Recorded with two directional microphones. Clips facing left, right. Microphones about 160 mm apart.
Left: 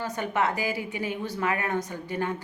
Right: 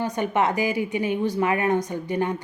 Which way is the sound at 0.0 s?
20° right (ahead or behind).